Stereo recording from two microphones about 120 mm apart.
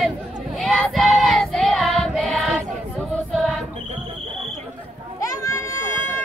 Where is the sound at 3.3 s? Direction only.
Centre (ahead or behind).